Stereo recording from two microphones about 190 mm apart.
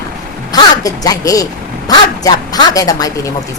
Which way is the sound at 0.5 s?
20° left (ahead or behind).